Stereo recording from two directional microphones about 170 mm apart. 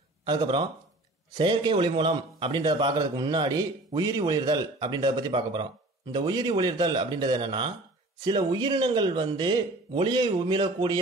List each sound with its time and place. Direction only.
0.2 s a man's voice: 25° right (ahead or behind)